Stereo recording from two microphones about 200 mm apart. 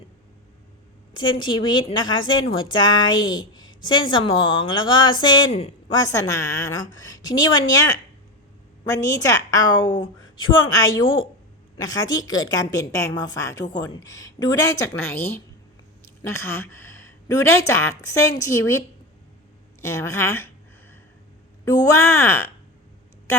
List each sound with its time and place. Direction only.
1.1 s a woman's voice: 25° left (ahead or behind)
5.5 s a woman's voice: 30° left (ahead or behind)
6.0 s a woman's voice: 15° left (ahead or behind)
19.8 s a woman's voice: 15° left (ahead or behind)
21.6 s a woman's voice: 15° left (ahead or behind)